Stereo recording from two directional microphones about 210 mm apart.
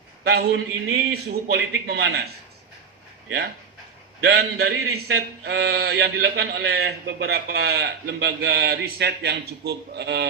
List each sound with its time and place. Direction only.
0.3 s speech: 50° right (ahead or behind)
4.2 s speech: 50° right (ahead or behind)